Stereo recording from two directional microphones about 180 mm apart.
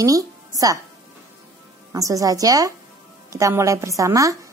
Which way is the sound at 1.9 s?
20° right (ahead or behind).